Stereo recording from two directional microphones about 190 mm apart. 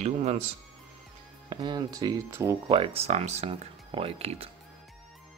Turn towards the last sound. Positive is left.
turn(degrees=-30)  # may be behind; listen again after turning